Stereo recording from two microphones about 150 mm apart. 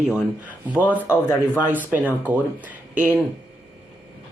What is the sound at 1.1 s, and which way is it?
Speech, 15° left (ahead or behind).